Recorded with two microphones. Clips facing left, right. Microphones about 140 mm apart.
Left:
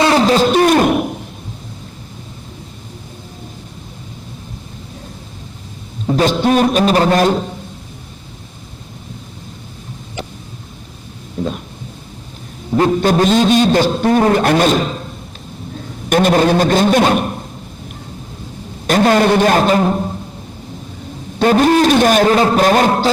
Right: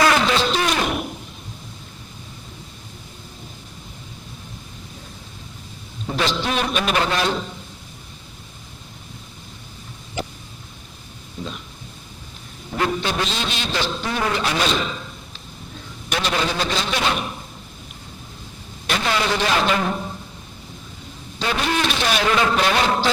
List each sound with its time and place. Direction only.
0.0 s a sound: 35° left (ahead or behind)
6.1 s a man's voice: 45° left (ahead or behind)
11.4 s a sound: 50° left (ahead or behind)
12.7 s a man's voice: 45° left (ahead or behind)
18.9 s a man's voice: 45° left (ahead or behind)
21.3 s a man's voice: 45° left (ahead or behind)